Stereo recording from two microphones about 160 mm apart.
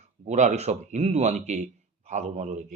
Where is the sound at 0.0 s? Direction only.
45° right (ahead or behind).